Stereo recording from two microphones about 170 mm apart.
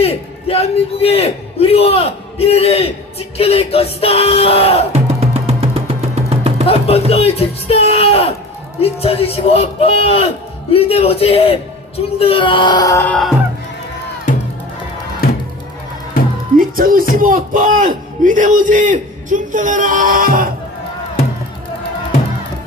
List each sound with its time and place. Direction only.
0.0 s a man's voice: 35° left (ahead or behind)
4.9 s music: 40° right (ahead or behind)
6.7 s a man's voice: 35° left (ahead or behind); by 13.1 s 15° left (ahead or behind)
16.6 s a man's voice: 55° right (ahead or behind)